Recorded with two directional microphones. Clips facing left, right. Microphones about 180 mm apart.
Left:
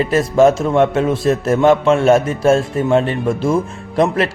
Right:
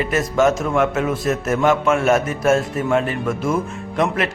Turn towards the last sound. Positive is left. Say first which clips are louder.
# left 5 dB
turn(degrees=35)  # may be behind; listen again after turning